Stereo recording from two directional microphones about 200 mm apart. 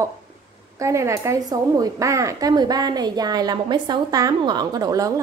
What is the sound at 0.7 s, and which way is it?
Speech, 15° right (ahead or behind).